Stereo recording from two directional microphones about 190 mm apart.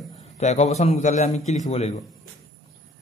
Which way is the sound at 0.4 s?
35° left (ahead or behind).